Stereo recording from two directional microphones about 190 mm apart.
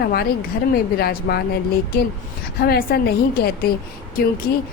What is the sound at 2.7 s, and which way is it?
A woman's voice, 55° left (ahead or behind).